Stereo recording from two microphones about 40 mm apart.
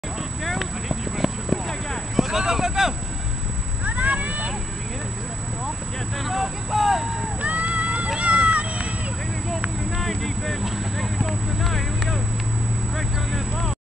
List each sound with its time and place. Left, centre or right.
0.4 s clip-clop: centre
2.1 s a sound: centre
3.8 s a sound: right
6.1 s speech: centre
7.4 s run: right
9.9 s speech: centre